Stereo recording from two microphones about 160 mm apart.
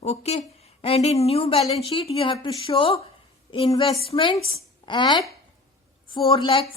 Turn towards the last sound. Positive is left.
turn(degrees=35)  # may be behind; listen again after turning